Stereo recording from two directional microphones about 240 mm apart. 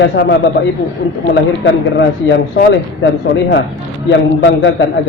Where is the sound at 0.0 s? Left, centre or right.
Left.